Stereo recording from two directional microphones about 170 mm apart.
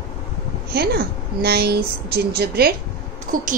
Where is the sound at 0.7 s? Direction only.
70° right (ahead or behind).